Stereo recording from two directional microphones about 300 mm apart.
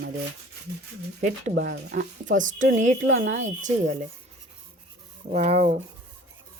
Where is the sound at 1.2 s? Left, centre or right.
Right.